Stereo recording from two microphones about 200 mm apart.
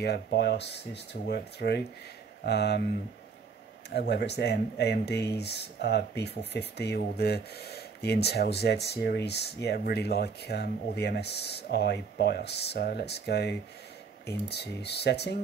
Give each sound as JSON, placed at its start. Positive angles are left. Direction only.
{"t": 0.0, "sound": "speech", "side_deg": 55}
{"t": 3.9, "sound": "speech", "side_deg": 55}